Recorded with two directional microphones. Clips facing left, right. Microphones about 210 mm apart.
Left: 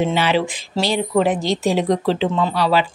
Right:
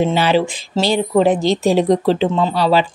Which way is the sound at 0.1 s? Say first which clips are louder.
Right 3 dB; 35° right (ahead or behind).